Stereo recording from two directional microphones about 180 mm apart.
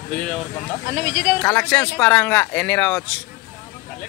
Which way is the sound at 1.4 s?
10° left (ahead or behind).